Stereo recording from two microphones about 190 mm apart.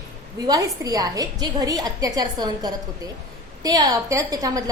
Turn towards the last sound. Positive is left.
turn(degrees=-20)  # may be behind; listen again after turning